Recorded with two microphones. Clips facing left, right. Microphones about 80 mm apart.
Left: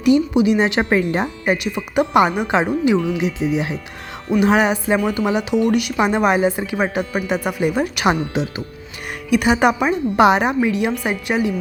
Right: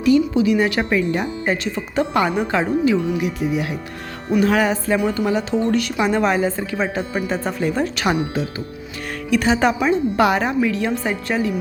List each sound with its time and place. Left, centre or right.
0.0 s speech: left
0.9 s speech: left
1.2 s a woman's voice: centre